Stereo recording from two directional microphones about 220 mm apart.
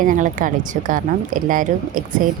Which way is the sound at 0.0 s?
35° right (ahead or behind).